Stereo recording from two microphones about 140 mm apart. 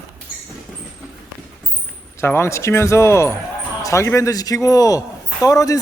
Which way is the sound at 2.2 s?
15° left (ahead or behind).